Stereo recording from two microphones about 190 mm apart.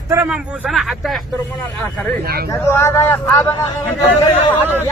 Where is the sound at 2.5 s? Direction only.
15° left (ahead or behind).